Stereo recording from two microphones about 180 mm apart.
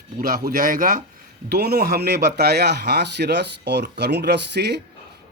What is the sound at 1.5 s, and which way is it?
Speech, 65° right (ahead or behind).